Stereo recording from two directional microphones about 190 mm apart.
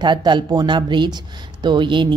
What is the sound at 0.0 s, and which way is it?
Speech, 25° right (ahead or behind).